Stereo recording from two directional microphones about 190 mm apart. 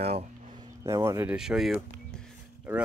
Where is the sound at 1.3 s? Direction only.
5° right (ahead or behind).